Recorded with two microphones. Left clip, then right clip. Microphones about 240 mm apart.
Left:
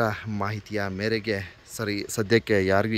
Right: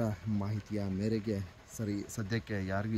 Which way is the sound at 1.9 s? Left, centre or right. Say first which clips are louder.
Left 12 dB; left.